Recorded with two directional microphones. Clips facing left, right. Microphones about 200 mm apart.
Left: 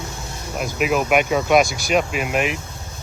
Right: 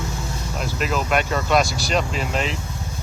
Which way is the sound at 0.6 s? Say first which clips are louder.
Left 5 dB; 10° left (ahead or behind).